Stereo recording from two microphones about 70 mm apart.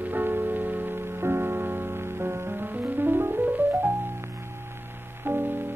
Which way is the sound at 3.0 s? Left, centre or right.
Right.